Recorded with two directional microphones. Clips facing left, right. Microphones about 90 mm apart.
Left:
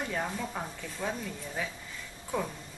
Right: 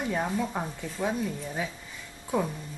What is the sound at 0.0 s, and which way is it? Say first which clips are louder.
Speech: right 5 dB; 15° right (ahead or behind).